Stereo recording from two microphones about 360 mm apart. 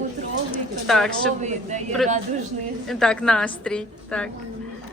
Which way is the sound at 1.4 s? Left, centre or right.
Centre.